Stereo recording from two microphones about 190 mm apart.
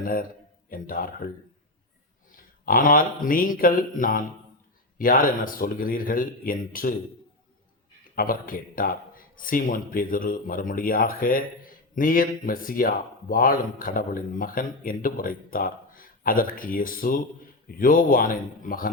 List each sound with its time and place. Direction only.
0.0 s a man's voice: 45° left (ahead or behind)
2.3 s a man's voice: 45° left (ahead or behind)
8.1 s a man's voice: 50° left (ahead or behind)